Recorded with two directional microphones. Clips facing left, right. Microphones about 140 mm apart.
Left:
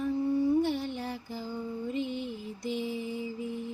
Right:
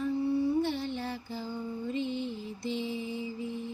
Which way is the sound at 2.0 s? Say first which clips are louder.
Right 2 dB; 50° left (ahead or behind).